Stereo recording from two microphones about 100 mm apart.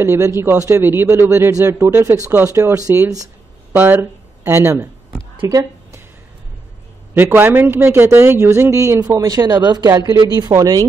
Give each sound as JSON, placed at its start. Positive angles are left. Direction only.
{"t": 0.0, "sound": "a man's voice", "side_deg": -25}
{"t": 3.7, "sound": "speech", "side_deg": -20}
{"t": 7.2, "sound": "a man's voice", "side_deg": -20}
{"t": 9.2, "sound": "speech", "side_deg": -40}